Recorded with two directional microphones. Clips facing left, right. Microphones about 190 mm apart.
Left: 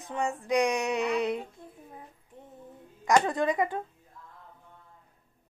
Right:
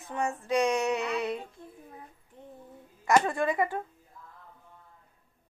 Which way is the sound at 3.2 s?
15° left (ahead or behind).